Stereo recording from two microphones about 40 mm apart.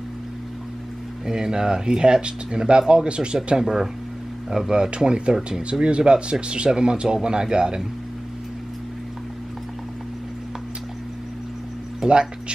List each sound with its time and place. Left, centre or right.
1.2 s speech: centre
12.1 s speech: right